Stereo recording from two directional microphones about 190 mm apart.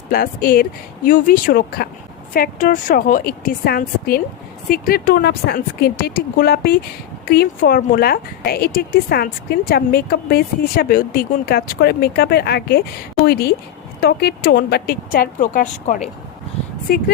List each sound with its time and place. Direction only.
0.1 s speech: 50° left (ahead or behind)